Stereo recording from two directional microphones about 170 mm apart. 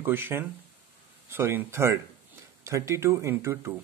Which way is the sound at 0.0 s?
15° right (ahead or behind).